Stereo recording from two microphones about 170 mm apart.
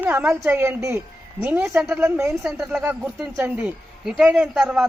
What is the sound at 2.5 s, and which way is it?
A man's voice, centre (ahead or behind).